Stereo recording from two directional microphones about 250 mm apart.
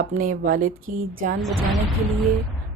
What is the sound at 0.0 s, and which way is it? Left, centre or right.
Speech, right.